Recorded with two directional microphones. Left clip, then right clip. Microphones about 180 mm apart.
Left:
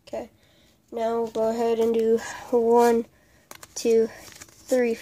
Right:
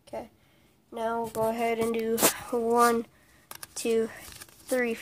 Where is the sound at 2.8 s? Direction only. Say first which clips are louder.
Left 3 dB; 15° left (ahead or behind).